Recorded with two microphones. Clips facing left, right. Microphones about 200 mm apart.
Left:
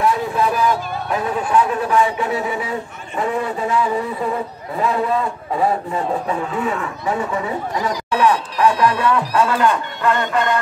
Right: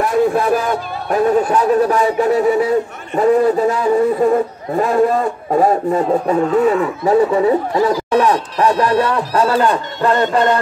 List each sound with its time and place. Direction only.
0.0 s a man's voice: 50° right (ahead or behind); by 10.6 s 35° right (ahead or behind)